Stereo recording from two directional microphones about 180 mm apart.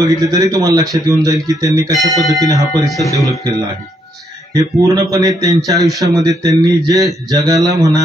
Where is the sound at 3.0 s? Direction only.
15° left (ahead or behind).